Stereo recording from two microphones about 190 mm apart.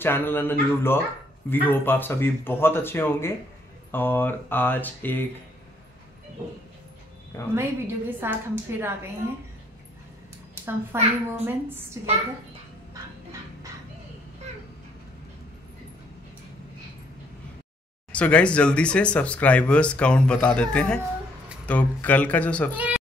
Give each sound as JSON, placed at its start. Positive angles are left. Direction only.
{"t": 0.0, "sound": "speech", "side_deg": 10}
{"t": 7.5, "sound": "a woman's voice", "side_deg": -10}
{"t": 10.5, "sound": "a child's voice", "side_deg": -10}
{"t": 18.1, "sound": "speech", "side_deg": 5}
{"t": 22.8, "sound": "speech", "side_deg": -10}